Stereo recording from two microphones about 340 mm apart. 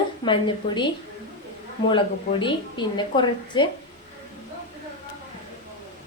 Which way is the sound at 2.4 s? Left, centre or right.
Centre.